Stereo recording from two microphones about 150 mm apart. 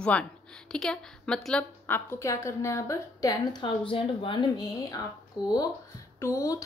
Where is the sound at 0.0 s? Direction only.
5° left (ahead or behind); by 3.7 s 20° left (ahead or behind).